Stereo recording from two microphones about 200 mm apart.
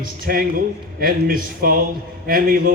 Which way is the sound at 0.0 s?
45° right (ahead or behind).